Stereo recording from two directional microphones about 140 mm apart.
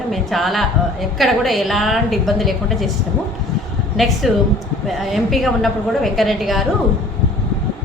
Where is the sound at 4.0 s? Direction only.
Centre (ahead or behind).